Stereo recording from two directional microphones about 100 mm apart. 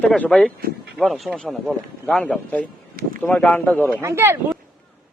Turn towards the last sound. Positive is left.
turn(degrees=-25)  # may be behind; listen again after turning